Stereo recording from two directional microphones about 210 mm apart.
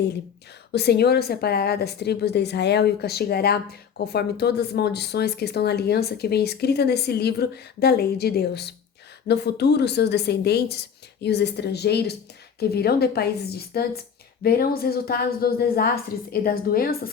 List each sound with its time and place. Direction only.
0.7 s a woman's voice: 50° left (ahead or behind)